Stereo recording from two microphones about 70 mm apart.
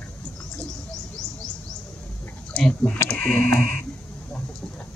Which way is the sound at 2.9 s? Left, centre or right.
Left.